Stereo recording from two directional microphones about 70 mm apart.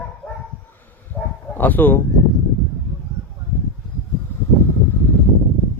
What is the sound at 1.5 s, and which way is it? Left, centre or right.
Speech, left.